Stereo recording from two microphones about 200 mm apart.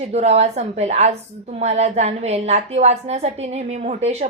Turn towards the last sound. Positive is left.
turn(degrees=-30)  # may be behind; listen again after turning